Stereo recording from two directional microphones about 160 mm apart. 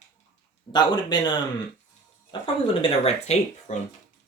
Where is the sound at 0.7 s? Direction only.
25° left (ahead or behind); by 3.7 s 40° left (ahead or behind).